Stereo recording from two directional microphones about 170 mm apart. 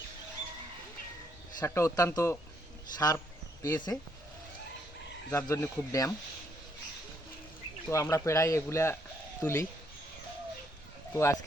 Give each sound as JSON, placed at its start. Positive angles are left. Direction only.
{"t": 1.5, "sound": "speech", "side_deg": 15}
{"t": 3.6, "sound": "speech", "side_deg": 20}
{"t": 5.3, "sound": "speech", "side_deg": 15}
{"t": 7.9, "sound": "speech", "side_deg": 20}
{"t": 11.1, "sound": "speech", "side_deg": 15}